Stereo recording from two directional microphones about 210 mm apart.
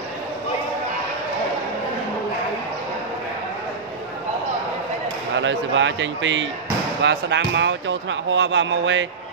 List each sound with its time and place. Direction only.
5.4 s speech: 60° right (ahead or behind)